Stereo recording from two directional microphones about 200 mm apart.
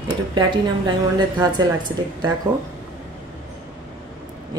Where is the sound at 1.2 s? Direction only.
20° right (ahead or behind).